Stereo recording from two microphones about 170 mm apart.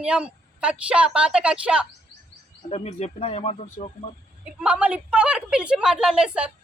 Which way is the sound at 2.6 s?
35° left (ahead or behind).